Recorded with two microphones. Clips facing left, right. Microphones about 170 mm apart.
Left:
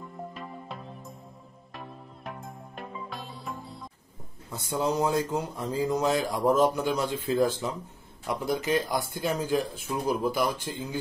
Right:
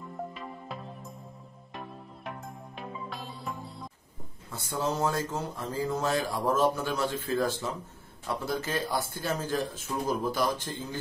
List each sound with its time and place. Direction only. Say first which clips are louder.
0.3 s music: left 1 dB; centre (ahead or behind)
1.8 s music: even; centre (ahead or behind)
4.5 s speech: left 3 dB; 15° left (ahead or behind)